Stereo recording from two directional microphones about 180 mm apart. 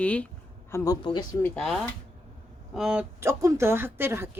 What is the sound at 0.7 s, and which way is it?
Speech, 20° left (ahead or behind).